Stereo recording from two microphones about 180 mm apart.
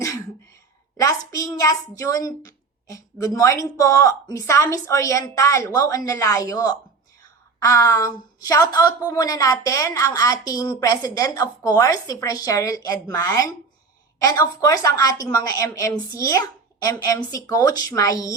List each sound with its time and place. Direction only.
0.9 s a woman's voice: 20° left (ahead or behind)